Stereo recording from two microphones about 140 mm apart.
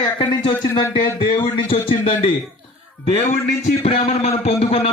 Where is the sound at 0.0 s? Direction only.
30° left (ahead or behind).